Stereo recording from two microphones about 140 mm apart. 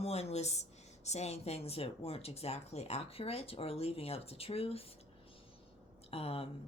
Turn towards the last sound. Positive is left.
turn(degrees=45)  # may be behind; listen again after turning